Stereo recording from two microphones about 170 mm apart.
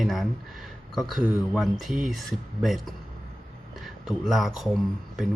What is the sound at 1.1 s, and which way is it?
Speech, centre (ahead or behind).